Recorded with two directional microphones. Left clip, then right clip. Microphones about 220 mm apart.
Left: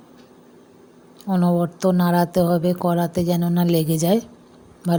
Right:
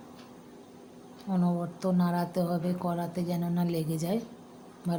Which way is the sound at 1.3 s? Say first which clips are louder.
Left 11 dB; 30° left (ahead or behind).